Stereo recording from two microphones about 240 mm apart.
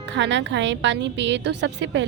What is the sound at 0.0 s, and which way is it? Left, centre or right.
Speech, right.